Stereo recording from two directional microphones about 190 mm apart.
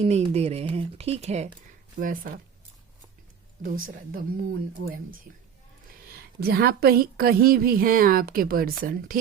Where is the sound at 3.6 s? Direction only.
45° right (ahead or behind).